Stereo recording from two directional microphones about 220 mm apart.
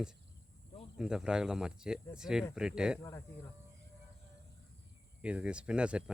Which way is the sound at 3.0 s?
10° left (ahead or behind).